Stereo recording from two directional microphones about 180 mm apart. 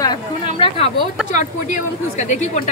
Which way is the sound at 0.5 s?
30° left (ahead or behind).